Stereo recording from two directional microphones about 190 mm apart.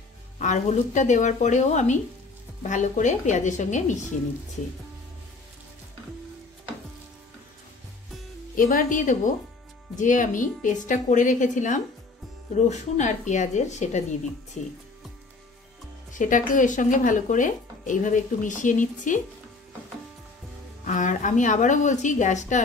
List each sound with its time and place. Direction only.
0.4 s a woman's voice: 40° left (ahead or behind)
8.5 s a woman's voice: 45° left (ahead or behind)
16.1 s speech: 45° left (ahead or behind)
20.8 s a woman's voice: 40° left (ahead or behind)